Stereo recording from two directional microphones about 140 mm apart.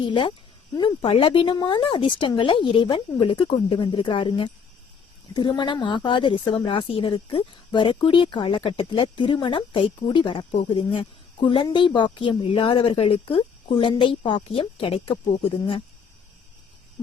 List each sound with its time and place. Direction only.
0.0 s a woman's voice: 35° left (ahead or behind)